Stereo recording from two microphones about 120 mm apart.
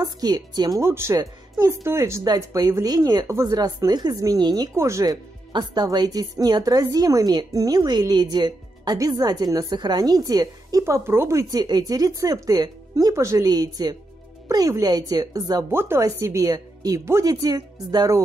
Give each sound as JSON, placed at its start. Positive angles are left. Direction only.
{"t": 0.0, "sound": "a woman's voice", "side_deg": -30}
{"t": 4.7, "sound": "a woman's voice", "side_deg": -25}
{"t": 15.7, "sound": "a woman's voice", "side_deg": -20}